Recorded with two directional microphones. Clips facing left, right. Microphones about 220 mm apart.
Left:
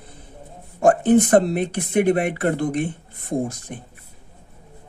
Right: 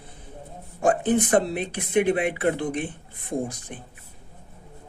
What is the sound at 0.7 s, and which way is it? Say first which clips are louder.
Speech: left 6 dB; 45° left (ahead or behind).